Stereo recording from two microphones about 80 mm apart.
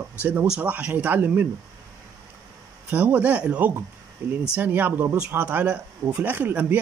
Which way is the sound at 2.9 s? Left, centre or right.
Centre.